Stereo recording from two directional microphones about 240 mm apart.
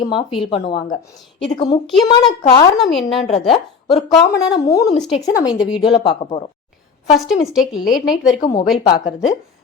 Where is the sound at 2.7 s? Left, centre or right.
Centre.